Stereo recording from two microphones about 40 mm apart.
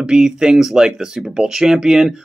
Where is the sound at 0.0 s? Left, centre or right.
Centre.